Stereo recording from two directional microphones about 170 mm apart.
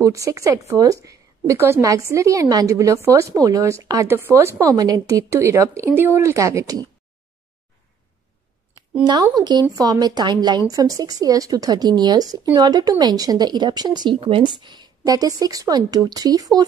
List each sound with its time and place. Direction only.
0.0 s a woman's voice: 20° right (ahead or behind)
9.0 s speech: 25° right (ahead or behind)